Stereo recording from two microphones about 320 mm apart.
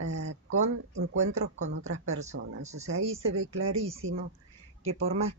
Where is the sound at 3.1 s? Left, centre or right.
Right.